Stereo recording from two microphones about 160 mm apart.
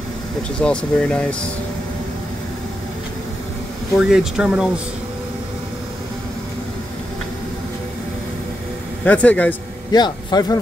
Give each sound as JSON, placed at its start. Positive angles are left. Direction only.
{"t": 0.4, "sound": "speech", "side_deg": 5}
{"t": 4.0, "sound": "speech", "side_deg": -5}
{"t": 9.0, "sound": "speech", "side_deg": 10}
{"t": 9.9, "sound": "a man's voice", "side_deg": 25}